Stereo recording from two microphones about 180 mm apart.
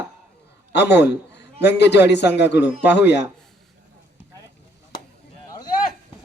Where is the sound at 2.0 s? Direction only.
70° left (ahead or behind).